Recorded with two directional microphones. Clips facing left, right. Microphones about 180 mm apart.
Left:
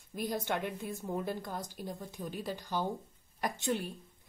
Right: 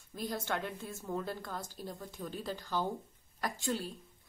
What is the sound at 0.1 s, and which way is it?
A woman's voice, 15° left (ahead or behind).